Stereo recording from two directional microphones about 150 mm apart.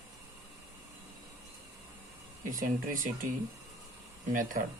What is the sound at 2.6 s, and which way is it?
Speech, 65° right (ahead or behind).